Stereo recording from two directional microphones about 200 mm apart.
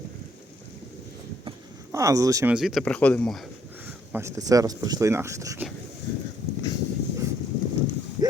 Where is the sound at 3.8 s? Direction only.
10° right (ahead or behind).